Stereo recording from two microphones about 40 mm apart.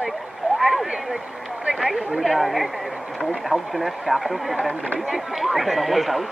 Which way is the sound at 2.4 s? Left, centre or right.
Centre.